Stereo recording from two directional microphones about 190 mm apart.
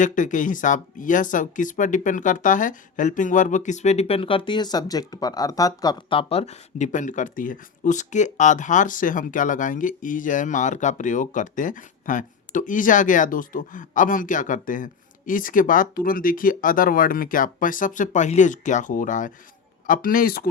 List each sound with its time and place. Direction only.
0.0 s speech: 40° left (ahead or behind)